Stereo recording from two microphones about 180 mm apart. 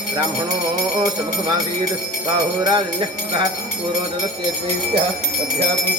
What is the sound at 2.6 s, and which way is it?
Jingle bell, 25° right (ahead or behind).